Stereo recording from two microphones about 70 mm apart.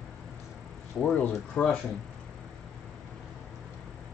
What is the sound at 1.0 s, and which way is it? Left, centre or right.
Speech, centre.